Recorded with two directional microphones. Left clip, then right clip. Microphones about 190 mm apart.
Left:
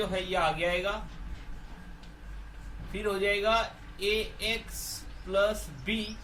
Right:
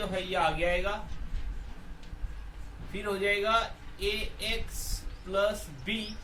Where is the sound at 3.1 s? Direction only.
20° right (ahead or behind).